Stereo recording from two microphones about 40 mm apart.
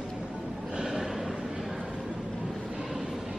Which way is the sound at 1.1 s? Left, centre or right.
Centre.